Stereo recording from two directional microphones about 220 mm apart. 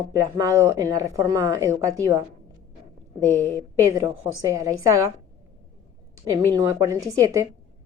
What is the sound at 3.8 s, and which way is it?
Speech, 15° right (ahead or behind).